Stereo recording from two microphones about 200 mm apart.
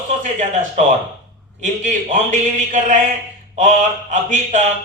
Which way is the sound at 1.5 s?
35° right (ahead or behind).